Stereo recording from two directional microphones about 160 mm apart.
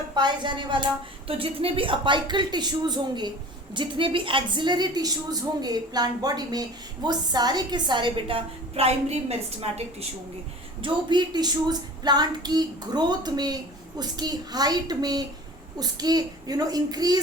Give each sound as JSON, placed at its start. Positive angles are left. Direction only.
{"t": 0.2, "sound": "a woman's voice", "side_deg": -30}
{"t": 10.8, "sound": "a woman's voice", "side_deg": -25}